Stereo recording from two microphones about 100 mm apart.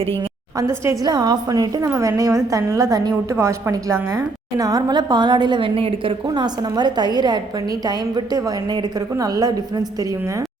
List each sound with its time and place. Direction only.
0.5 s a woman's voice: 30° right (ahead or behind)
1.0 s a woman's voice: 45° right (ahead or behind); by 6.1 s 65° right (ahead or behind)
6.2 s a woman's voice: 45° right (ahead or behind)